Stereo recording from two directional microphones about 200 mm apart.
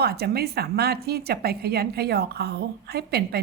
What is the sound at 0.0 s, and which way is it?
A woman's voice, 50° right (ahead or behind).